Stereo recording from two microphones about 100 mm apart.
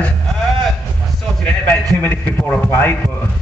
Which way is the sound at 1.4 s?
15° left (ahead or behind).